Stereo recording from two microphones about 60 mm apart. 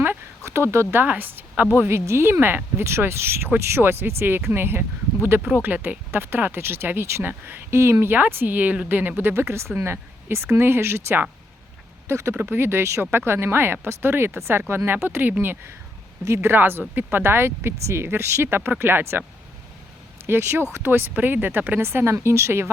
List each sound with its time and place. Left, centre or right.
0.4 s speech: right
1.0 s speech: right
1.8 s speech: right
9.3 s speech: right
12.3 s speech: right
20.2 s speech: right
21.8 s speech: right